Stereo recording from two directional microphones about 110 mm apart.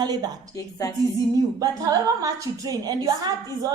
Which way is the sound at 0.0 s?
40° right (ahead or behind).